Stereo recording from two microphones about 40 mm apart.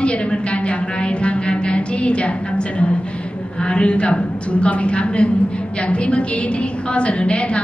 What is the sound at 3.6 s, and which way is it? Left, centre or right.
A woman's voice, left.